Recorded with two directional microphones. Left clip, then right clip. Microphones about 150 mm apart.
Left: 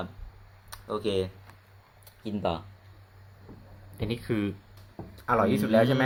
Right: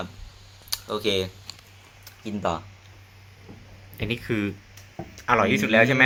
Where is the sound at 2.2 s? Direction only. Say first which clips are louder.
Right 3 dB; 5° left (ahead or behind).